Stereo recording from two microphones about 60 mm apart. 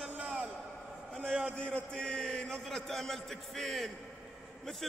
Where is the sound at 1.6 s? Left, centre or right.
Centre.